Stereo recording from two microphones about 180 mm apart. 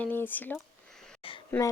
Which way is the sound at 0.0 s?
10° left (ahead or behind).